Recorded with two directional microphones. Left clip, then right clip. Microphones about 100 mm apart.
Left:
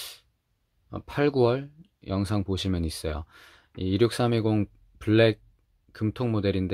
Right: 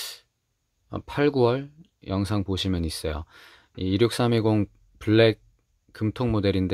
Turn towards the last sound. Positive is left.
turn(degrees=-25)  # may be behind; listen again after turning